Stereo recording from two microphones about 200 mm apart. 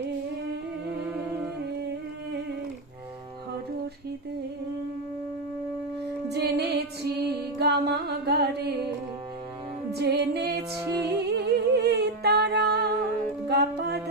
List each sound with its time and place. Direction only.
6.2 s music: 55° right (ahead or behind)
9.9 s music: 55° right (ahead or behind)